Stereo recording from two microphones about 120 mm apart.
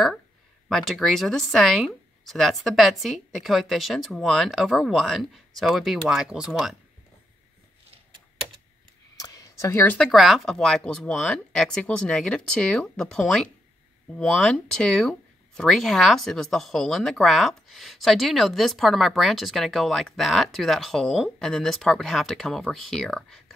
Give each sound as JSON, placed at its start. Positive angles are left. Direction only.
{"t": 0.7, "sound": "speech", "side_deg": 0}
{"t": 9.1, "sound": "a sound", "side_deg": 30}
{"t": 9.9, "sound": "speech", "side_deg": 0}